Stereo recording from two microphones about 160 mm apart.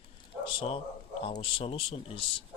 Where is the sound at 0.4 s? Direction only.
35° left (ahead or behind).